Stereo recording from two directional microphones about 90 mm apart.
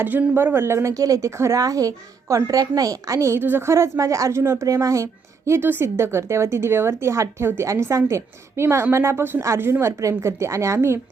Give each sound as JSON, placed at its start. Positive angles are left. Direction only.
{"t": 0.0, "sound": "speech", "side_deg": -20}
{"t": 5.5, "sound": "a woman's voice", "side_deg": -25}